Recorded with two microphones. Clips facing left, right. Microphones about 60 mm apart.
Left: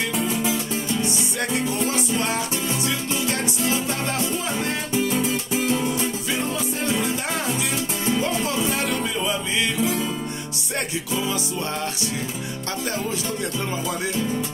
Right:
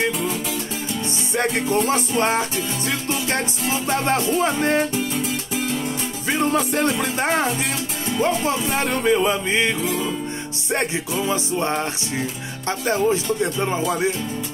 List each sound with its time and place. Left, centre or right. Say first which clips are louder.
1.0 s music: right 3 dB; right
6.2 s music: right 5 dB; right
10.7 s music: right 4 dB; right
12.6 s speech: right 9 dB; right